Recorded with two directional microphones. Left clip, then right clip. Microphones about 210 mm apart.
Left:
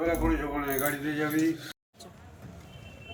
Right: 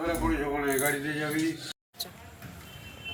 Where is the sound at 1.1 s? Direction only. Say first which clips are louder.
Left 2 dB; 20° left (ahead or behind).